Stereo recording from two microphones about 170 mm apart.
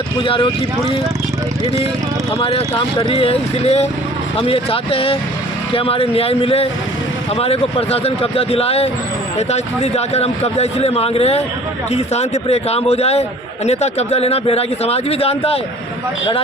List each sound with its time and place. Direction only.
0.2 s a man's voice: 30° left (ahead or behind)
2.4 s a man's voice: 35° left (ahead or behind)